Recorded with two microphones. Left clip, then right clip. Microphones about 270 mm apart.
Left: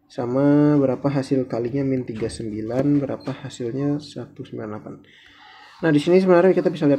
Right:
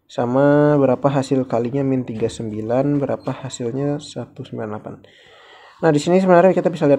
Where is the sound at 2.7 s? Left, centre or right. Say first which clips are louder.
Right 3 dB; right.